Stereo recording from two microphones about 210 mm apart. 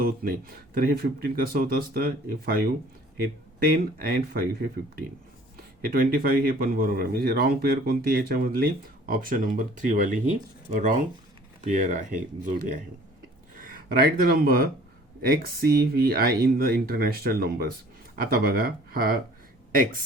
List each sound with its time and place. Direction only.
0.0 s speech: 45° right (ahead or behind)
5.8 s speech: 45° right (ahead or behind)